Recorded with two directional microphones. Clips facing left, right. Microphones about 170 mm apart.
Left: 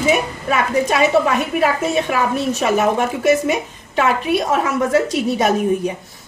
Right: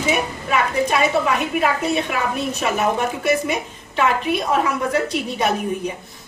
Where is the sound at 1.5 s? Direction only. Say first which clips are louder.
Left 2 dB; 40° left (ahead or behind).